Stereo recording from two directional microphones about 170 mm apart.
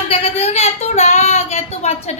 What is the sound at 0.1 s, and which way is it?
Child singing, 35° left (ahead or behind).